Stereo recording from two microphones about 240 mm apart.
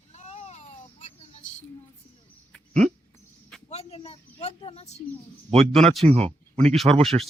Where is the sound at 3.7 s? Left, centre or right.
Left.